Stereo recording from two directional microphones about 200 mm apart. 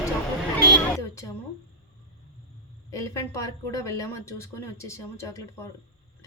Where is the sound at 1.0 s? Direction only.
15° left (ahead or behind).